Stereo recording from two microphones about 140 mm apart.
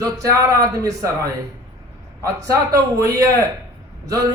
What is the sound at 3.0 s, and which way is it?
Speech, 25° right (ahead or behind).